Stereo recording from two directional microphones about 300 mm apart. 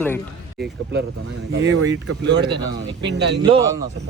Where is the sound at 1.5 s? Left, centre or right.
Right.